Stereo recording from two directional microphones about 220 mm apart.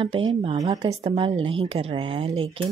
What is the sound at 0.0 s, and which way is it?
Speech, 25° right (ahead or behind).